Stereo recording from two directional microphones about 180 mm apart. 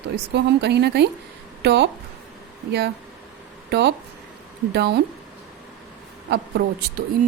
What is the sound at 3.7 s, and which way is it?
A woman's voice, 70° right (ahead or behind).